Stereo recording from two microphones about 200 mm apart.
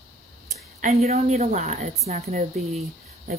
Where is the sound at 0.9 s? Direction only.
30° right (ahead or behind).